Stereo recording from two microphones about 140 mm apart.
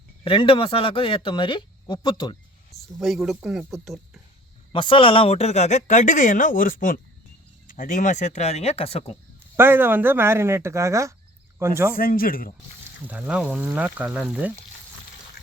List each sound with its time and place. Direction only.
0.3 s speech: 40° left (ahead or behind)
3.0 s speech: centre (ahead or behind)
4.7 s speech: 35° left (ahead or behind)
9.6 s speech: 15° right (ahead or behind)
11.9 s speech: 90° left
13.1 s speech: 10° right (ahead or behind)